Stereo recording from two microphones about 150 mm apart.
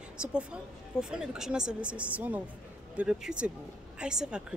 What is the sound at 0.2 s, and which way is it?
A woman's voice, 5° right (ahead or behind).